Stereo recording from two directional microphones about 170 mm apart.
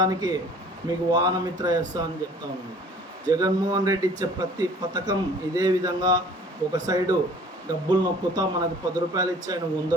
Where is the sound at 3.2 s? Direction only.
20° right (ahead or behind).